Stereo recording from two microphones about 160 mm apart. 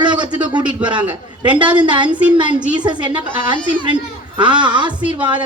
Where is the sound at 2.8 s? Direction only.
30° right (ahead or behind).